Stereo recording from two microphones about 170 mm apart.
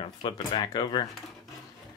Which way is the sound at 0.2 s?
25° left (ahead or behind).